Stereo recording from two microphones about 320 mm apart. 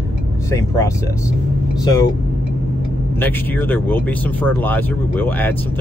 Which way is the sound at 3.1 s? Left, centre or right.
Centre.